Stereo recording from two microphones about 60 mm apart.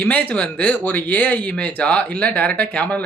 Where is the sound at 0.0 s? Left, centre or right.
Left.